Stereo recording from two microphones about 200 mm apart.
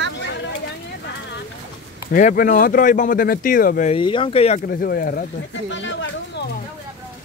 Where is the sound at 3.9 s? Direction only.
25° left (ahead or behind).